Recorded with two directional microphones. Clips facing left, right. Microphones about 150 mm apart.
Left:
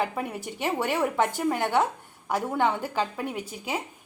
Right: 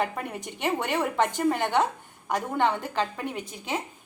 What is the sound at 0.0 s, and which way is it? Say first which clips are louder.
A woman's voice: left 1 dB; 5° left (ahead or behind).